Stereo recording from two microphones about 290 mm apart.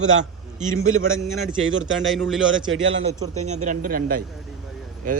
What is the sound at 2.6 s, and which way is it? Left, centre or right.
Speech, right.